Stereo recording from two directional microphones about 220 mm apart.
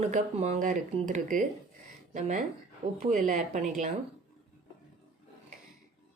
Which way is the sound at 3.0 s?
30° right (ahead or behind).